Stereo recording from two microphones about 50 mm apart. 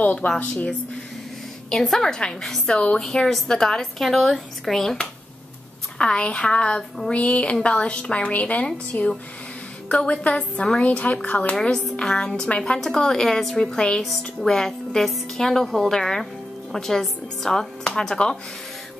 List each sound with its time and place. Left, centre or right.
0.0 s a woman's voice: left
1.7 s a woman's voice: centre
5.9 s a woman's voice: left
11.6 s a woman's voice: centre